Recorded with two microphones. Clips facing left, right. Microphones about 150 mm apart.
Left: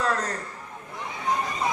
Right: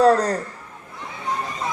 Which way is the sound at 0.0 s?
35° right (ahead or behind).